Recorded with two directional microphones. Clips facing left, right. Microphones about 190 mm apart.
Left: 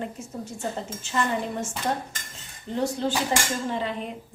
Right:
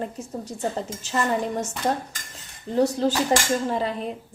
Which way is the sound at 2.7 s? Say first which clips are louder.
Right 5 dB; 40° right (ahead or behind).